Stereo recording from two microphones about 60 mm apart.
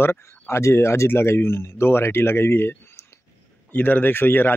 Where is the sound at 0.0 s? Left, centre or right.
Left.